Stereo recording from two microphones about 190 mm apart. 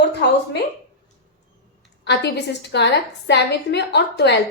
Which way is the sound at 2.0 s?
65° left (ahead or behind).